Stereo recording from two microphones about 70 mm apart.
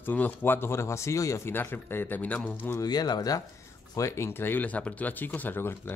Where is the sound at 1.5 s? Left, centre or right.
Left.